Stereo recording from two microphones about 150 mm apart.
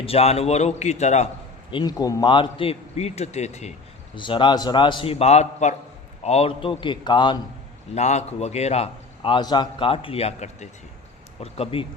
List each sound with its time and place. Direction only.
0.0 s a man's voice: 40° left (ahead or behind)
1.7 s a man's voice: 25° left (ahead or behind); by 3.7 s 50° left (ahead or behind)
4.1 s a man's voice: 35° left (ahead or behind)
7.9 s a man's voice: 50° left (ahead or behind)